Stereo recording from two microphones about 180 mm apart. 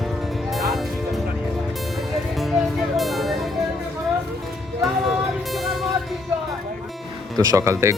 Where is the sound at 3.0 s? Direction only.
Centre (ahead or behind).